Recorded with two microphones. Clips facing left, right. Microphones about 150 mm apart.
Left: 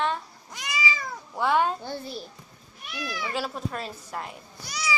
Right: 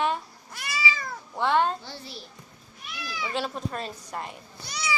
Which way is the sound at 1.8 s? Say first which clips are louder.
Left 7 dB; 50° left (ahead or behind).